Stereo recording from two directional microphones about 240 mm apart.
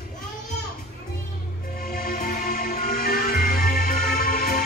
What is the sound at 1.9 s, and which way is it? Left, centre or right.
Music, left.